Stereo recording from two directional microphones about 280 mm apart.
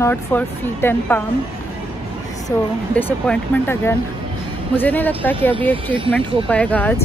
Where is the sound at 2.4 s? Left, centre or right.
Centre.